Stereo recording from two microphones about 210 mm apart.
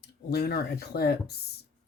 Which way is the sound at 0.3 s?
50° left (ahead or behind).